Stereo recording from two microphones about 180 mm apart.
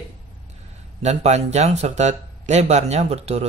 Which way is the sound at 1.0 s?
40° right (ahead or behind).